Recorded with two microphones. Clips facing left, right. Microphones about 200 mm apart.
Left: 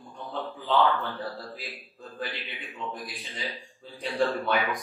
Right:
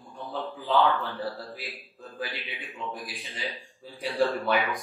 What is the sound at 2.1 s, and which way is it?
A man's voice, centre (ahead or behind).